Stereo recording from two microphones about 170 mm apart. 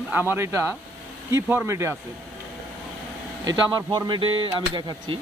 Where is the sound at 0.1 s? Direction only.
10° right (ahead or behind).